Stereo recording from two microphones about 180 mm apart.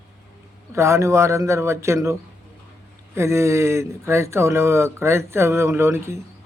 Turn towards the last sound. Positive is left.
turn(degrees=-15)  # may be behind; listen again after turning